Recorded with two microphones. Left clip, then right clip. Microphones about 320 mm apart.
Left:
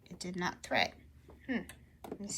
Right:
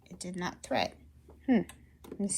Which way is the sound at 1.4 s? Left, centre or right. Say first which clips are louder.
Right 9 dB; right.